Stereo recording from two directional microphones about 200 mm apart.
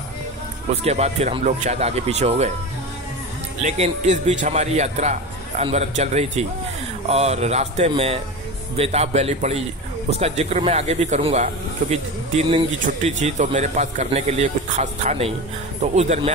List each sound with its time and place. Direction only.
0.8 s speech: 30° right (ahead or behind)
3.6 s speech: 30° right (ahead or behind)